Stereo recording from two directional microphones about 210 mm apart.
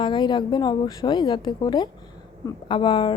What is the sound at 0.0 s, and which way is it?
A woman's voice, 20° left (ahead or behind).